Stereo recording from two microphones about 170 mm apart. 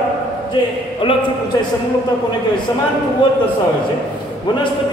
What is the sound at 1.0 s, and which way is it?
Speech, 30° left (ahead or behind).